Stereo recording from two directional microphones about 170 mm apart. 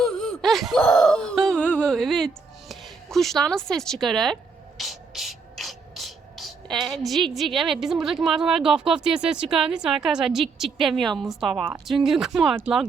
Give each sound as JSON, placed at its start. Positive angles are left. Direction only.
{"t": 0.0, "sound": "a sound", "side_deg": 5}
{"t": 1.8, "sound": "speech", "side_deg": 5}
{"t": 4.8, "sound": "ratchet", "side_deg": 0}
{"t": 7.3, "sound": "speech", "side_deg": 0}